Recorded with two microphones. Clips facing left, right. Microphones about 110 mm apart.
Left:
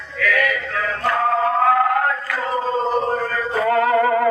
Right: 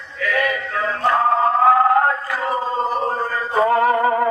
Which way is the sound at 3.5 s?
25° right (ahead or behind).